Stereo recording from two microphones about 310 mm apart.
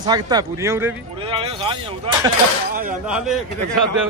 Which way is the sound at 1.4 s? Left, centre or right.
Centre.